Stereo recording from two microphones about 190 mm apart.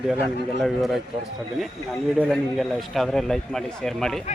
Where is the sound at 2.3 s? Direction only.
Centre (ahead or behind).